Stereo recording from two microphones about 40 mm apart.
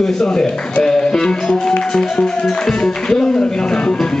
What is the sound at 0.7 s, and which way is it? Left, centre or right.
Music, centre.